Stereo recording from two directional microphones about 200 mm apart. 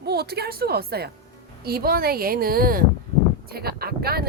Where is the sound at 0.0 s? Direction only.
50° right (ahead or behind).